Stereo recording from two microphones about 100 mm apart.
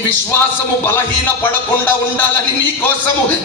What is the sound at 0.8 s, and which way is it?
Speech, 20° left (ahead or behind).